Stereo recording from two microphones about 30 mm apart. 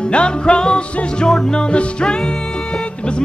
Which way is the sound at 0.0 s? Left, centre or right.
Left.